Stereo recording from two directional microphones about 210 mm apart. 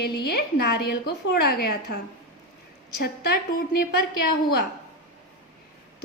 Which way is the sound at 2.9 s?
50° left (ahead or behind).